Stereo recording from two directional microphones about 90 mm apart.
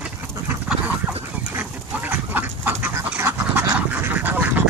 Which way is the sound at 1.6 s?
20° right (ahead or behind).